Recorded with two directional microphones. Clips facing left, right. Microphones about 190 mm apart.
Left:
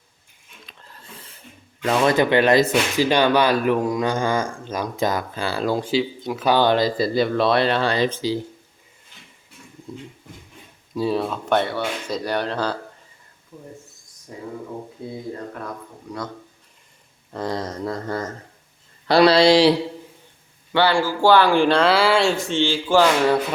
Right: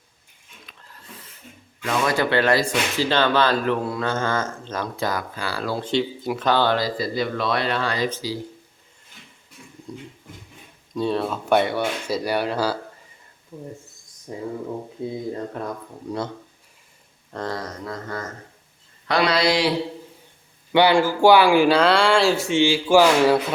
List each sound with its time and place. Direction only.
1.8 s speech: 35° left (ahead or behind)
2.1 s speech: 20° left (ahead or behind)
5.9 s speech: centre (ahead or behind)
6.5 s speech: 15° left (ahead or behind)
10.9 s speech: 5° left (ahead or behind); by 13.7 s 15° right (ahead or behind)
14.3 s speech: 25° right (ahead or behind)
17.3 s speech: 10° left (ahead or behind)
17.6 s speech: 30° left (ahead or behind)
20.7 s speech: 15° right (ahead or behind)